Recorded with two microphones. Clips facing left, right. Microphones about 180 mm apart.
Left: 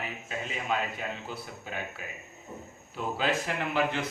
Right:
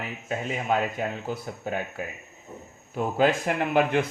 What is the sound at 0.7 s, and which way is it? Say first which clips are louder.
Speech: right 6 dB; 50° right (ahead or behind).